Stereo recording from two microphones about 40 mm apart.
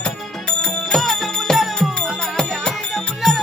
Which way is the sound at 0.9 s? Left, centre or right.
Centre.